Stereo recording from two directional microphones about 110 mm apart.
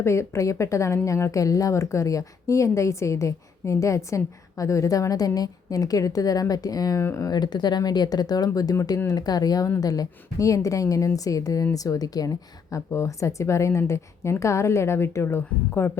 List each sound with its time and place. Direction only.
0.0 s a woman's voice: 25° left (ahead or behind)